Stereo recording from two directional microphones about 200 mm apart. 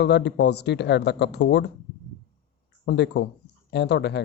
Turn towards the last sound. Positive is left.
turn(degrees=60)  # may be behind; listen again after turning